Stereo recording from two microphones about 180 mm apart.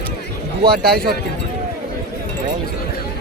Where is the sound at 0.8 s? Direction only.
60° right (ahead or behind).